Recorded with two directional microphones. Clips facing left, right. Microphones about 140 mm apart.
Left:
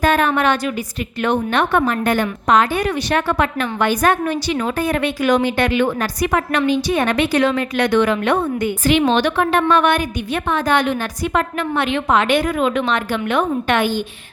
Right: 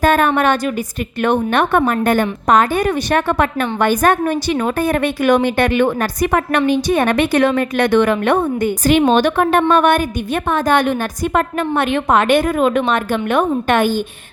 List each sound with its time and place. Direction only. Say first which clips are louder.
0.0 s a woman's voice: right 2 dB; 50° right (ahead or behind)